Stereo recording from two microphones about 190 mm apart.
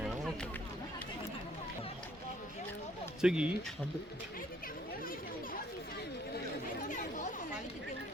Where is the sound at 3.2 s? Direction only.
5° right (ahead or behind).